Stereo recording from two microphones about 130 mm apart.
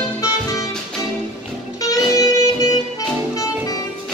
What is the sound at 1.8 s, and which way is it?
Music, 25° left (ahead or behind).